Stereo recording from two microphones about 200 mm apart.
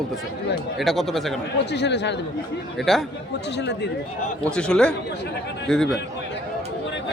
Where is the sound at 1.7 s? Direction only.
60° left (ahead or behind).